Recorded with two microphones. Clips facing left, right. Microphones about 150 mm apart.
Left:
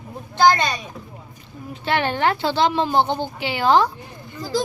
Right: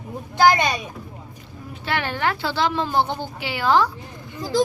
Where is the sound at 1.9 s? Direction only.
25° left (ahead or behind).